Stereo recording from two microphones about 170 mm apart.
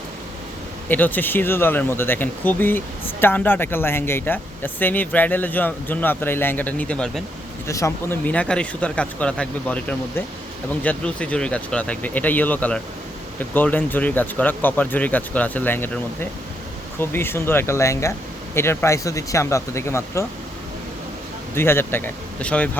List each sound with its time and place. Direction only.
0.9 s speech: 10° left (ahead or behind)
7.7 s speech: 15° left (ahead or behind)
21.5 s speech: 15° left (ahead or behind)